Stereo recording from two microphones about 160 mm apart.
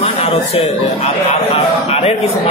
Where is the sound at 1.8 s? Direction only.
40° left (ahead or behind).